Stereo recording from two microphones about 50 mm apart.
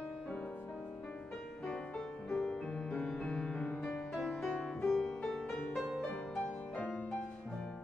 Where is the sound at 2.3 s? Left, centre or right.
Centre.